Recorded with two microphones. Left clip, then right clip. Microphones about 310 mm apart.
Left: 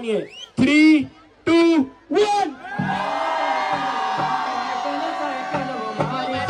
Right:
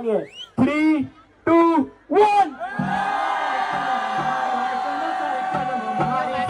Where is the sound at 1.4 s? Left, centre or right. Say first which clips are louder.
Even; centre.